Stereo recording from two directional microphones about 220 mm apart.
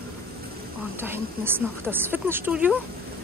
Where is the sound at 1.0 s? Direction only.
10° right (ahead or behind).